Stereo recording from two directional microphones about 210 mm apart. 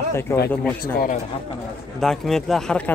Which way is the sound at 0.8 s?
40° left (ahead or behind).